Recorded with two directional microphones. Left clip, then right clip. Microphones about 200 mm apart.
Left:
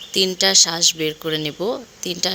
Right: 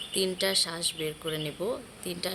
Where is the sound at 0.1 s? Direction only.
40° left (ahead or behind).